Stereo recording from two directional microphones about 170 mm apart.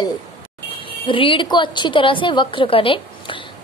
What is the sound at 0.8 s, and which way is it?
A woman's voice, 30° left (ahead or behind).